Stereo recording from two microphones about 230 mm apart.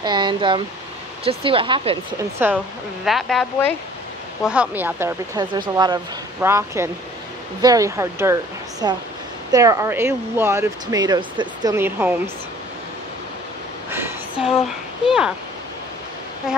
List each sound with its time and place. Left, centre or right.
0.0 s speech: centre
2.4 s speech: centre
13.8 s a sound: centre
15.0 s speech: centre